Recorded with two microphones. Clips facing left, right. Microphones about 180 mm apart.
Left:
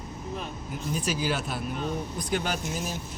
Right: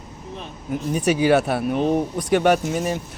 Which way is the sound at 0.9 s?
65° right (ahead or behind).